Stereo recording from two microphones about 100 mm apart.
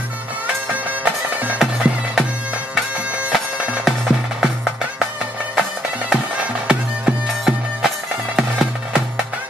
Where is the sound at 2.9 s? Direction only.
10° right (ahead or behind).